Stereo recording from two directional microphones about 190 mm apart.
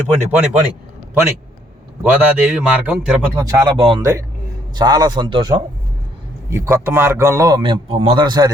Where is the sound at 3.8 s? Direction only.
30° right (ahead or behind).